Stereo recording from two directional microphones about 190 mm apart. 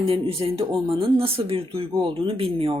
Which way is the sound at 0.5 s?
30° right (ahead or behind).